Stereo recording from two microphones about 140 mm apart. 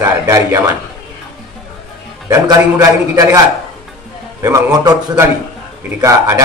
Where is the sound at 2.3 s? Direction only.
25° right (ahead or behind).